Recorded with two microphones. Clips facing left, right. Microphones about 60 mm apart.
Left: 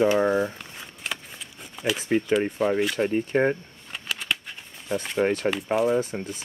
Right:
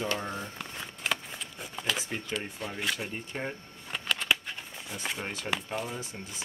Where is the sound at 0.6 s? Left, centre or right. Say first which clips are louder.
Right 1 dB; centre.